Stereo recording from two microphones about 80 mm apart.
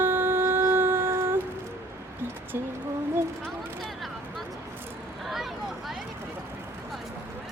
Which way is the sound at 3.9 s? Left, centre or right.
Centre.